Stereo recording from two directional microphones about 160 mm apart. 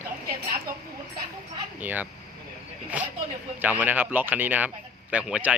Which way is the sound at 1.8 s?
10° right (ahead or behind).